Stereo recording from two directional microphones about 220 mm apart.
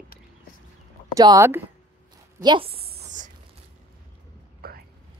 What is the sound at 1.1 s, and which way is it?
A woman's voice, 15° right (ahead or behind).